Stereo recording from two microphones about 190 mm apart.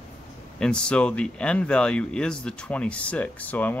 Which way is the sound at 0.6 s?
5° left (ahead or behind).